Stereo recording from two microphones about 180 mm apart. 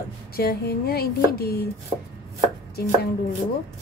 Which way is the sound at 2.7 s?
60° left (ahead or behind).